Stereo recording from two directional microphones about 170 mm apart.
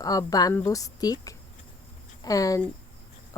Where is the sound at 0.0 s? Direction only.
20° left (ahead or behind).